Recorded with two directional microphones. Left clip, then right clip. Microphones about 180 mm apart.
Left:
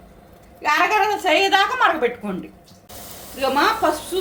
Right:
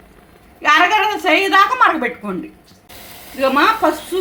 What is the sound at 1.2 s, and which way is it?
Speech, 25° right (ahead or behind).